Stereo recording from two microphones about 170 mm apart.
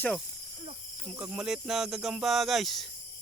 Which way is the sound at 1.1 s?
5° right (ahead or behind).